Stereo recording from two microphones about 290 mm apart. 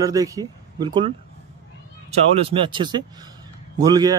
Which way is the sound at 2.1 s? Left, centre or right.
Right.